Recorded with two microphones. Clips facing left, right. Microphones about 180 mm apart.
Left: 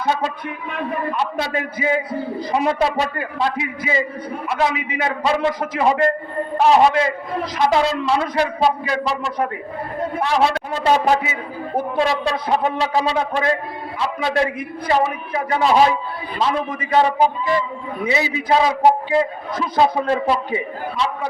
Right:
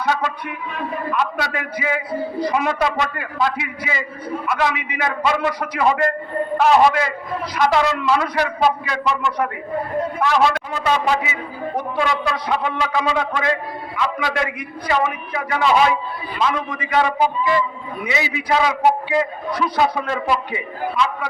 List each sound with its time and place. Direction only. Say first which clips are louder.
1.2 s a man's voice: left 1 dB; 35° left (ahead or behind)
11.0 s a man's voice: left 2 dB; 45° left (ahead or behind)
11.9 s a man's voice: left 2 dB; 35° left (ahead or behind)